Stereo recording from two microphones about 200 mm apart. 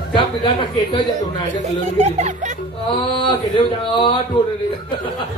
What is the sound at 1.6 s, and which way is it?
Speech, 35° right (ahead or behind).